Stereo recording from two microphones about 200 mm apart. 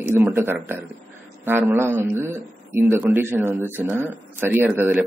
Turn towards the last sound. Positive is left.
turn(degrees=-10)  # may be behind; listen again after turning